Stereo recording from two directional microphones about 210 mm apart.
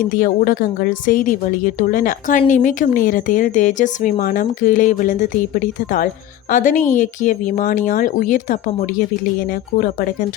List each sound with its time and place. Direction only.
0.0 s speech: 40° left (ahead or behind)